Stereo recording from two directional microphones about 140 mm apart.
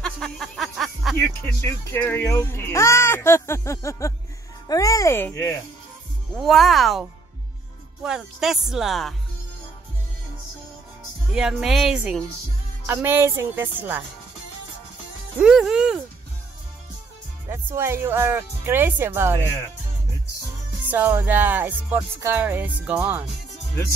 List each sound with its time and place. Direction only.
0.0 s a sound: centre (ahead or behind)
1.1 s speech: 20° left (ahead or behind)
6.3 s speech: centre (ahead or behind)
11.3 s speech: 5° right (ahead or behind)
12.8 s music: 15° right (ahead or behind)
15.3 s speech: 5° right (ahead or behind)
17.5 s music: 20° right (ahead or behind)
20.9 s music: 15° right (ahead or behind)